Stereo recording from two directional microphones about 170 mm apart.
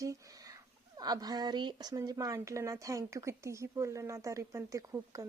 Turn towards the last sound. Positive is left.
turn(degrees=-20)  # may be behind; listen again after turning